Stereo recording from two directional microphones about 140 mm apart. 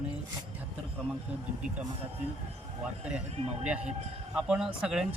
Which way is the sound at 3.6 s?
10° right (ahead or behind).